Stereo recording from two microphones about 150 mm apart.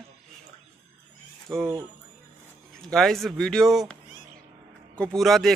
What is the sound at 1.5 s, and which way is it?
Speech, 25° right (ahead or behind).